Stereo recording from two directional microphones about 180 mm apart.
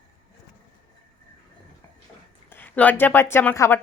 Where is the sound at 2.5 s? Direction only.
10° left (ahead or behind).